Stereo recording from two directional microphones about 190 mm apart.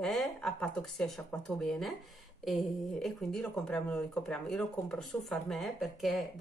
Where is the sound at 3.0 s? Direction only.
5° left (ahead or behind).